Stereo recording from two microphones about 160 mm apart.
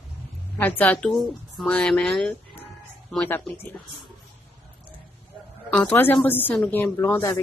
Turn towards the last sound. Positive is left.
turn(degrees=15)  # may be behind; listen again after turning